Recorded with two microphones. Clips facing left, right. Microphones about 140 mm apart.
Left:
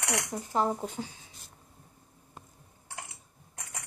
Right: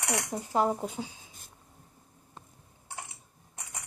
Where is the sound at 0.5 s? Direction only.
10° right (ahead or behind).